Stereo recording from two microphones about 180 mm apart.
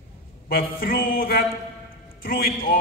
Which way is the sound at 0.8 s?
55° left (ahead or behind).